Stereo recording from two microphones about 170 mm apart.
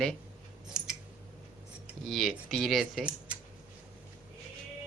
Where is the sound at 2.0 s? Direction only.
Centre (ahead or behind).